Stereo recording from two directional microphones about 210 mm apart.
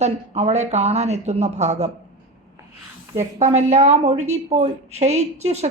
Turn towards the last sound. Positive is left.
turn(degrees=-30)  # may be behind; listen again after turning